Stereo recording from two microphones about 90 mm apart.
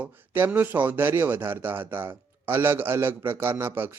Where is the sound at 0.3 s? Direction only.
25° right (ahead or behind).